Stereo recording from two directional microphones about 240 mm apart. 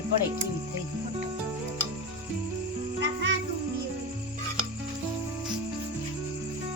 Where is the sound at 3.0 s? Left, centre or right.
Right.